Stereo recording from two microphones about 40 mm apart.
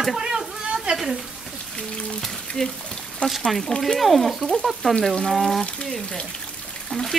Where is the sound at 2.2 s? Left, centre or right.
Centre.